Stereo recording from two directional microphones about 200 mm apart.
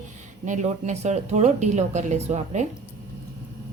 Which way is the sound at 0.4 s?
35° right (ahead or behind).